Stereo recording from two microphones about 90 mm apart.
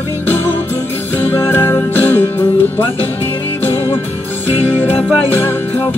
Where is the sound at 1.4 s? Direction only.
25° left (ahead or behind).